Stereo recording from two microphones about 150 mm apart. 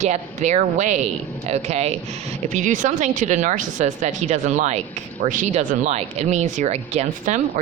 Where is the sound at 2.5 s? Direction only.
55° right (ahead or behind).